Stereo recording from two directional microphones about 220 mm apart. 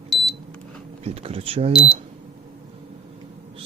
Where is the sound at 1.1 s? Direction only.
25° right (ahead or behind).